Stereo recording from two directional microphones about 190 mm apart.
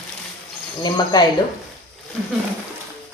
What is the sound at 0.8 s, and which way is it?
Speech, 20° left (ahead or behind).